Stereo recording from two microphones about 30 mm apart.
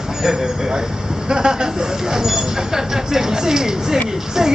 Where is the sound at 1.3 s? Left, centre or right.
Right.